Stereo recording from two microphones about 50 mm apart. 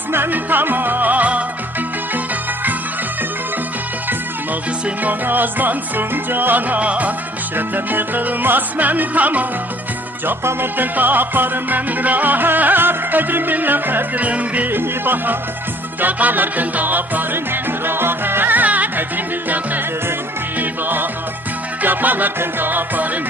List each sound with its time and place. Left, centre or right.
0.1 s music: right
5.0 s music: right
7.5 s music: right
10.2 s music: right
14.7 s music: right